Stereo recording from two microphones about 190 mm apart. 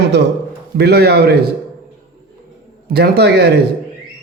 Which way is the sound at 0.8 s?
60° right (ahead or behind).